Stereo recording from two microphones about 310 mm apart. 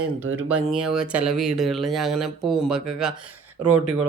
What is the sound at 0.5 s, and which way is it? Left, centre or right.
Speech, centre.